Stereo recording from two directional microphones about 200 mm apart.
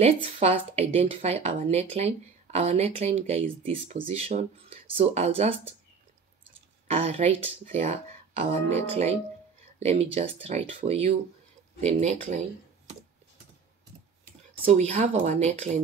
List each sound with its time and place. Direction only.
0.0 s speech: 30° right (ahead or behind)
6.9 s speech: 30° right (ahead or behind)
14.6 s speech: 35° right (ahead or behind)